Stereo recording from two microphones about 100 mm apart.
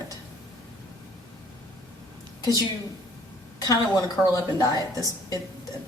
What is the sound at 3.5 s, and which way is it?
Speech, 35° left (ahead or behind).